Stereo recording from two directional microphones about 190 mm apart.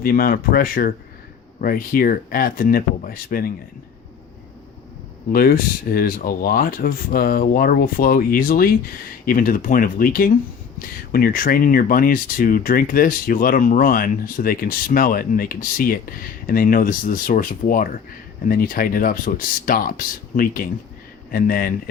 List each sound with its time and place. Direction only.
0.0 s speech: 50° left (ahead or behind)
5.3 s speech: 50° left (ahead or behind)